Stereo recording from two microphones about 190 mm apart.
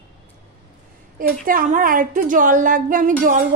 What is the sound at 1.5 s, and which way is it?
A woman's voice, 45° right (ahead or behind).